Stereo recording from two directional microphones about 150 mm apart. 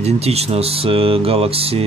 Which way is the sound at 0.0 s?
45° right (ahead or behind).